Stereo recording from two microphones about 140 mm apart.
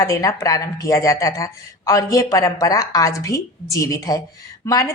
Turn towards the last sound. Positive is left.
turn(degrees=25)  # may be behind; listen again after turning